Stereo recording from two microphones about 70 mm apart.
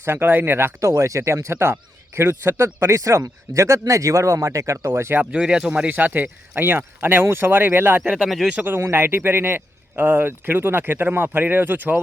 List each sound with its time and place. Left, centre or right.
0.0 s a man's voice: right
0.8 s speech: right
2.8 s speech: right
5.3 s speech: centre; by 8.1 s right
8.2 s speech: centre
8.6 s a man's voice: right